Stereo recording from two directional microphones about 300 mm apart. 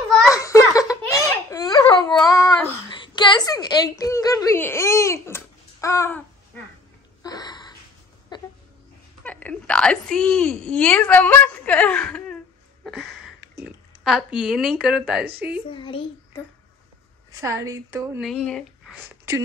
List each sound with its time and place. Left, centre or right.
0.3 s giggle: centre
2.2 s a sound: centre
7.2 s gasp: centre
8.3 s music: centre
9.2 s a woman's voice: centre
12.8 s a sound: centre
14.0 s a woman's voice: centre
15.7 s a child's voice: centre
17.3 s a woman's voice: centre
18.3 s speech: centre